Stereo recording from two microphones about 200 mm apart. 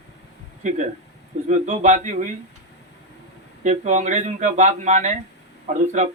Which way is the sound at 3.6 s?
40° right (ahead or behind).